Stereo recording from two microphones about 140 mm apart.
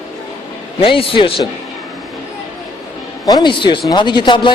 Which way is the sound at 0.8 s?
40° left (ahead or behind).